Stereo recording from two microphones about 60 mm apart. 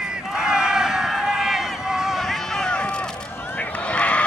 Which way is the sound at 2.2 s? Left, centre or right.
Centre.